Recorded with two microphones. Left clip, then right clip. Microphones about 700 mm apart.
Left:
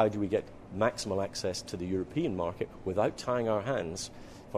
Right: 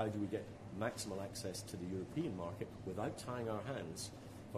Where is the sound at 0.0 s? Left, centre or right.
Left.